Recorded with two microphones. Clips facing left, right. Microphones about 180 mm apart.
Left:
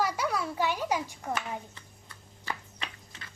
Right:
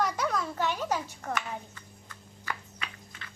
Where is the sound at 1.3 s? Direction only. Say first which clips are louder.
Even; 30° left (ahead or behind).